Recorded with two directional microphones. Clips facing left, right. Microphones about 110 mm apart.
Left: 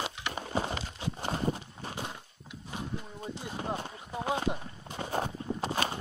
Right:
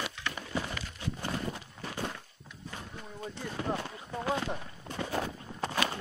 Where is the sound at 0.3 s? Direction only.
30° left (ahead or behind).